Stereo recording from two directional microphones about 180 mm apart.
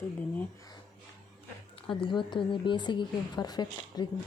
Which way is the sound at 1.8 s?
30° left (ahead or behind).